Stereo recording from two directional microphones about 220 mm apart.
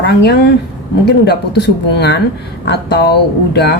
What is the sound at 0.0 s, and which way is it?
Speech, 50° left (ahead or behind).